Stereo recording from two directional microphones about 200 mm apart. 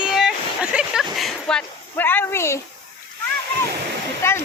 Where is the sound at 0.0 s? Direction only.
Centre (ahead or behind).